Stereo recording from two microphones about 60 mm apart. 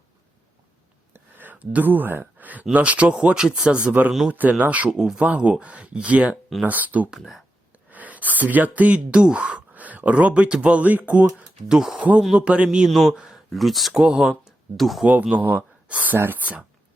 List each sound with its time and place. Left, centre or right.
1.1 s a sound: right
2.7 s speech: right
3.8 s speech: right
4.9 s speech: centre
5.2 s speech: centre
11.7 s speech: centre
11.9 s speech: right
12.2 s speech: centre
12.9 s speech: centre
14.0 s speech: centre
15.0 s speech: right
16.1 s speech: right
16.4 s speech: right